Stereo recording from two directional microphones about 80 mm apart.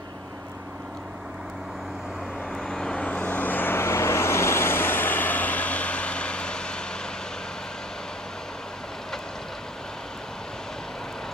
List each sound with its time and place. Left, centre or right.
2.5 s vehicle: centre